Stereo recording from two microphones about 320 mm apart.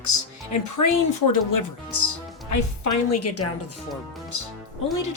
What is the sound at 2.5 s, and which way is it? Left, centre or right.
Speech, left.